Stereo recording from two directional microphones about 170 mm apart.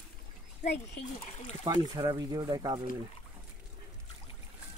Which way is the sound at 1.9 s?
25° right (ahead or behind).